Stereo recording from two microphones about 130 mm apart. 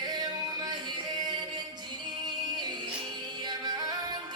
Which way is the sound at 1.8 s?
30° right (ahead or behind).